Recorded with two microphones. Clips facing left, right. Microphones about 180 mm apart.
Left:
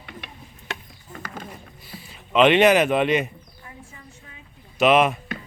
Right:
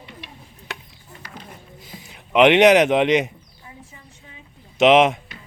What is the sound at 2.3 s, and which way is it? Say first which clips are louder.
Speech: right 3 dB; 15° right (ahead or behind).